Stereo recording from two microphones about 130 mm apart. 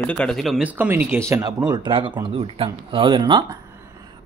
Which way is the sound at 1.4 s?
35° right (ahead or behind).